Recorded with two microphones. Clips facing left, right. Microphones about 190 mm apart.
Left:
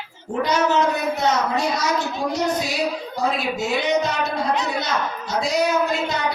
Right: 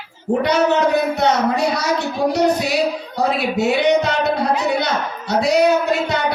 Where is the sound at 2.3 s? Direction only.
65° right (ahead or behind).